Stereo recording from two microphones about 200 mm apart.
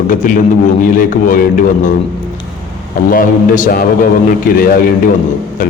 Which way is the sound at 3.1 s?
45° left (ahead or behind).